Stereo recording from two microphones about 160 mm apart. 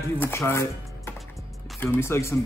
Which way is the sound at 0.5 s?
15° left (ahead or behind).